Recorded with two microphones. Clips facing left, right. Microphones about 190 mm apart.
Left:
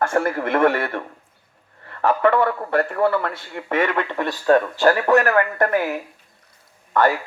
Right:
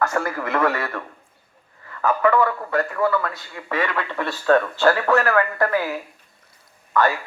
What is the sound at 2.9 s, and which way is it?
Speech, 30° left (ahead or behind).